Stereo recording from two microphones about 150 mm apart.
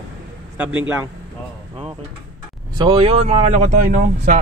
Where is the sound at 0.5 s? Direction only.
10° right (ahead or behind).